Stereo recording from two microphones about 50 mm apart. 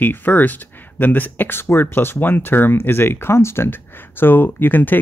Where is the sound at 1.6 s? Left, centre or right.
Left.